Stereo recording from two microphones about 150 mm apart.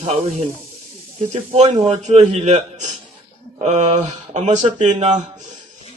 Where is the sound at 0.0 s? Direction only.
45° right (ahead or behind).